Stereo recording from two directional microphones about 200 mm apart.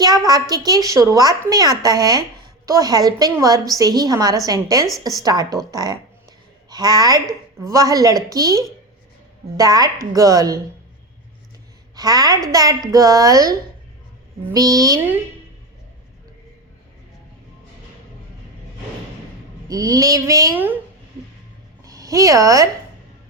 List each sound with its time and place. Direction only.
0.0 s a woman's voice: 20° right (ahead or behind)
11.9 s a woman's voice: 20° right (ahead or behind)
19.6 s a woman's voice: 20° right (ahead or behind)
21.8 s speech: 15° right (ahead or behind)